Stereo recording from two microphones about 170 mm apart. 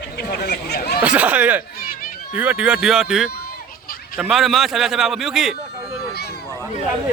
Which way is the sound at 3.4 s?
60° left (ahead or behind).